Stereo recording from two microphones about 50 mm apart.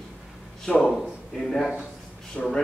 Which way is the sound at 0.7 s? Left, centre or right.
Centre.